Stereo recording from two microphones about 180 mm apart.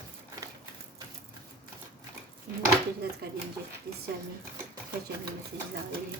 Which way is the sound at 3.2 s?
60° right (ahead or behind).